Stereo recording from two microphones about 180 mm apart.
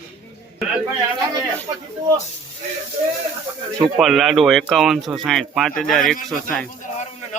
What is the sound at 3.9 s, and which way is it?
Speech, centre (ahead or behind).